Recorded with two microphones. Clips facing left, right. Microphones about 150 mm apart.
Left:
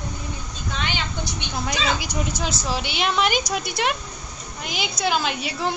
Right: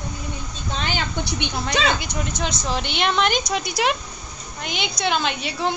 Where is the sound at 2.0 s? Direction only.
10° left (ahead or behind).